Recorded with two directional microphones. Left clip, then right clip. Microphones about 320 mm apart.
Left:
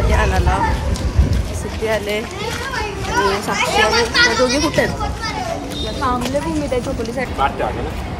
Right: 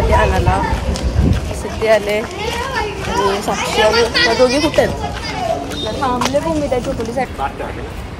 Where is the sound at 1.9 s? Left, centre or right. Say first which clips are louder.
Right 7 dB; centre.